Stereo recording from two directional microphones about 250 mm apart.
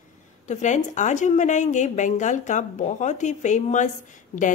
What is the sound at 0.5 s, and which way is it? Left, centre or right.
A woman's voice, left.